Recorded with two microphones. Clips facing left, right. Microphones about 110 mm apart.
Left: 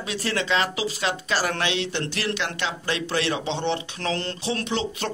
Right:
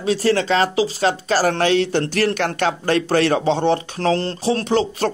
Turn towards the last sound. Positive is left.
turn(degrees=-40)  # may be behind; listen again after turning